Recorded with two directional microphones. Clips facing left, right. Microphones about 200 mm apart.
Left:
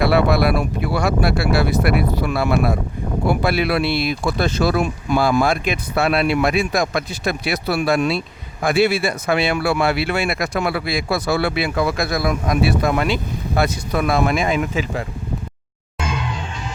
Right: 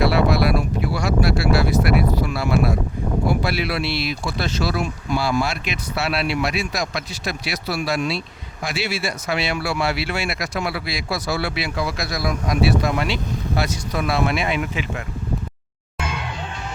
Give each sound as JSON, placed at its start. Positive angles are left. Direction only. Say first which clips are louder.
{"t": 0.0, "sound": "speech", "louder": "left 2 dB", "side_deg": 55}